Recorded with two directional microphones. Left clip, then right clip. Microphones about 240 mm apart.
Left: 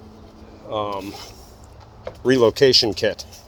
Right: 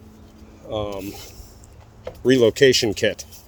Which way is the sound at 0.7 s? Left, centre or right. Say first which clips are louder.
Left 2 dB; right.